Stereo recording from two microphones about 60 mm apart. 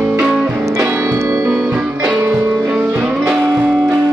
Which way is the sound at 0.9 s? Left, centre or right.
Right.